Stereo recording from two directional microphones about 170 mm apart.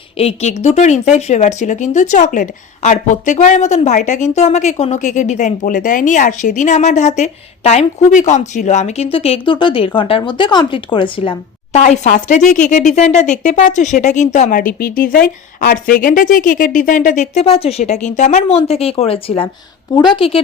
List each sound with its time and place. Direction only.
0.2 s a woman's voice: 35° left (ahead or behind)